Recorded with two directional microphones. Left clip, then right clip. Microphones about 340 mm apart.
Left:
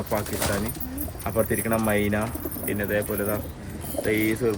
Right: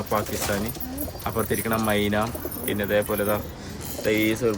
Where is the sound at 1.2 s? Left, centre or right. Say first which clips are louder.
Left 1 dB; centre.